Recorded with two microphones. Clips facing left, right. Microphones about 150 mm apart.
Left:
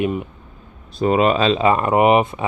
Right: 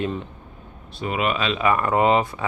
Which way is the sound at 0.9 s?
35° left (ahead or behind).